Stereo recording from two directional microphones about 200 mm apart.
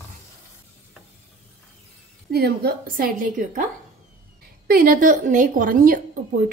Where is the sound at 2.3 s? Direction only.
50° right (ahead or behind).